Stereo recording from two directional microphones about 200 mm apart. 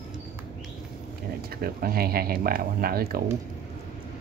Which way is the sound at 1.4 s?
50° right (ahead or behind).